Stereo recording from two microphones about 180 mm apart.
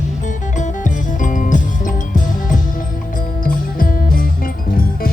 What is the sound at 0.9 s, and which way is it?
Music, 45° left (ahead or behind).